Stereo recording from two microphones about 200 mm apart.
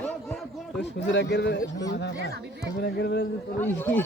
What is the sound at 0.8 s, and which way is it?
Speech, 60° left (ahead or behind).